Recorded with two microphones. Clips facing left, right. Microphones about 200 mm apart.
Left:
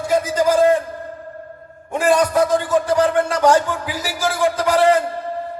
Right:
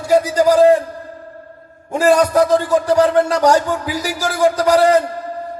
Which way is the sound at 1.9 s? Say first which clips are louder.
Right 3 dB; 40° right (ahead or behind).